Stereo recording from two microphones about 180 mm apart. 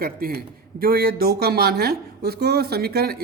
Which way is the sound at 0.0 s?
55° right (ahead or behind).